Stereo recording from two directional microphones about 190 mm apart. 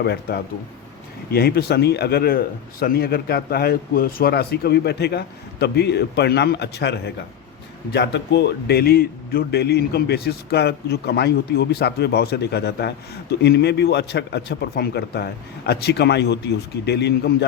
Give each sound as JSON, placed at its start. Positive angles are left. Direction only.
{"t": 0.0, "sound": "a man's voice", "side_deg": 60}